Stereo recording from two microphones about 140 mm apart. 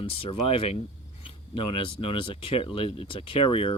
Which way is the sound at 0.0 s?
40° left (ahead or behind).